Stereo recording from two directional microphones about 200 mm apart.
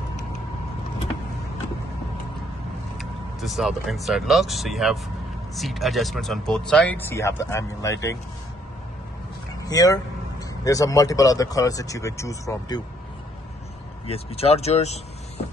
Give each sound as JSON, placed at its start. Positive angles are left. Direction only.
{"t": 3.0, "sound": "speech", "side_deg": 0}
{"t": 9.5, "sound": "vehicle", "side_deg": 20}
{"t": 10.6, "sound": "speech", "side_deg": 15}
{"t": 14.0, "sound": "speech", "side_deg": 30}